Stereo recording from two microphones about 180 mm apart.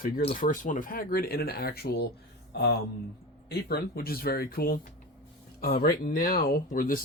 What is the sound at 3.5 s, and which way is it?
Speech, 60° left (ahead or behind).